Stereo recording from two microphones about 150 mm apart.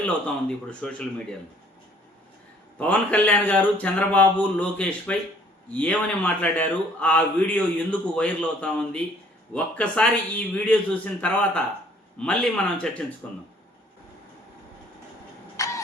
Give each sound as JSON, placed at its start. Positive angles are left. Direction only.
{"t": 0.7, "sound": "speech", "side_deg": 5}
{"t": 2.7, "sound": "speech", "side_deg": 10}
{"t": 15.5, "sound": "a sound", "side_deg": 20}